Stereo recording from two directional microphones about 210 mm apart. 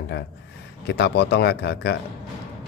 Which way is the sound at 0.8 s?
50° left (ahead or behind).